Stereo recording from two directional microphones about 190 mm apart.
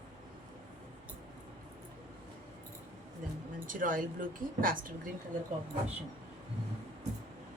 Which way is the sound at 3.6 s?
45° right (ahead or behind).